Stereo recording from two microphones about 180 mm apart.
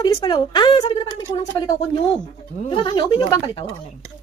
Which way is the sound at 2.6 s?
25° left (ahead or behind).